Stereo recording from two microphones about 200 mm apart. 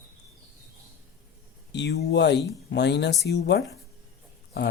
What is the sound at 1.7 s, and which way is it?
Speech, 55° left (ahead or behind).